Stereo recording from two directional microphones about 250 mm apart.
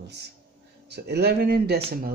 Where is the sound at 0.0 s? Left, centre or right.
Right.